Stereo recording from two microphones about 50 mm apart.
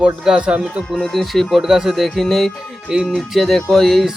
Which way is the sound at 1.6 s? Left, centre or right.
Centre.